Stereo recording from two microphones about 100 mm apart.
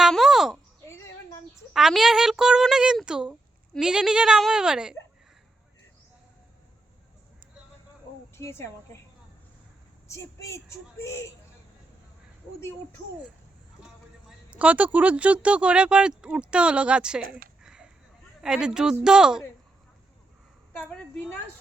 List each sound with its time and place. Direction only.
0.0 s a sound: centre (ahead or behind)
1.7 s speech: 5° right (ahead or behind)
8.4 s a woman's voice: 25° left (ahead or behind)
10.1 s speech: 30° left (ahead or behind)
14.3 s a sound: 15° right (ahead or behind)
14.9 s speech: 15° right (ahead or behind)
20.7 s a woman's voice: 15° left (ahead or behind)